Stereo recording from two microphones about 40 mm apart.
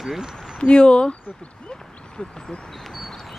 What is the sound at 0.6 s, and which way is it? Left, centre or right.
Speech, left.